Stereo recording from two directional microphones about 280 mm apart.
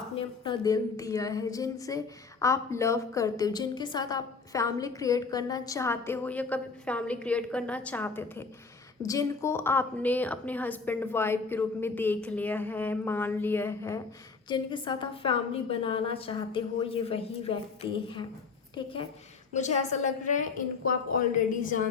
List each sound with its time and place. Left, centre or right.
0.2 s a woman's voice: centre
19.5 s a woman's voice: left